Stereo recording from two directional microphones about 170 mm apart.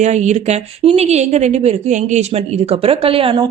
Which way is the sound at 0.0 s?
45° right (ahead or behind).